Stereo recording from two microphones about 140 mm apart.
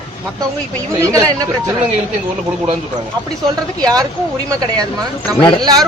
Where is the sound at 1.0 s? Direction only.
25° right (ahead or behind).